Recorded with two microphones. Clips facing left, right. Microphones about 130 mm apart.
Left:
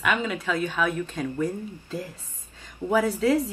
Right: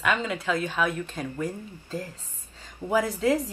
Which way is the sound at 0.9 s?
10° left (ahead or behind).